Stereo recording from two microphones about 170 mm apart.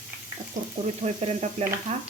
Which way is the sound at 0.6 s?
50° right (ahead or behind).